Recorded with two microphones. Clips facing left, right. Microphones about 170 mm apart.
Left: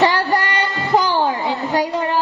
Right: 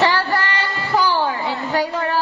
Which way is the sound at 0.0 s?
15° left (ahead or behind).